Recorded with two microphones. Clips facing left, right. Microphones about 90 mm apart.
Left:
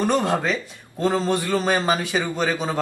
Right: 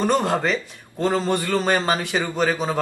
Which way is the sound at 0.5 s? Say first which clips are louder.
Right 2 dB; 5° left (ahead or behind).